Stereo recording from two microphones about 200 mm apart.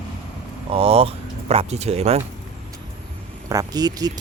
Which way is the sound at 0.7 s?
30° right (ahead or behind).